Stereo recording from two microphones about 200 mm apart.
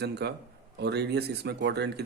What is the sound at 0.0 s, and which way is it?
Speech, 55° right (ahead or behind).